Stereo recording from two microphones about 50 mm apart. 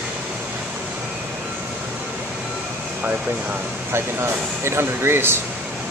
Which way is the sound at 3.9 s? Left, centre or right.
Right.